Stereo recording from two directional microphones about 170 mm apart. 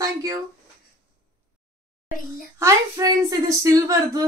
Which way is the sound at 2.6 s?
20° right (ahead or behind).